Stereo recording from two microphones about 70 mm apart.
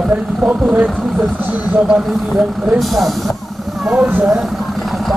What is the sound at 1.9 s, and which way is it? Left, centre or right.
Speech, centre.